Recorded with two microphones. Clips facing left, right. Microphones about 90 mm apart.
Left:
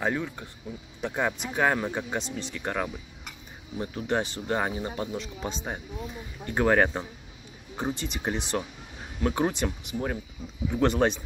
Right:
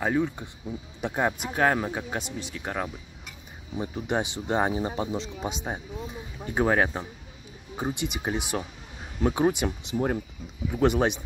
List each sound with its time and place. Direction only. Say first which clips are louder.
0.0 s speech: right 3 dB; 10° right (ahead or behind)
10.7 s speech: right 1 dB; 10° right (ahead or behind)